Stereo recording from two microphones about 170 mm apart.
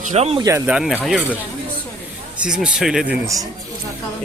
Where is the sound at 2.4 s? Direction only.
5° right (ahead or behind).